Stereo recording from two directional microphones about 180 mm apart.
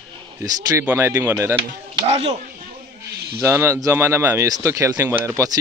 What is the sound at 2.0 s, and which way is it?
Speech, 35° right (ahead or behind).